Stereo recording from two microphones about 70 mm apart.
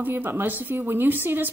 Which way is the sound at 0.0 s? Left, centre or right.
Right.